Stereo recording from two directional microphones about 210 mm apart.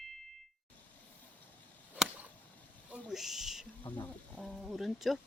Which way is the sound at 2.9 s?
5° right (ahead or behind).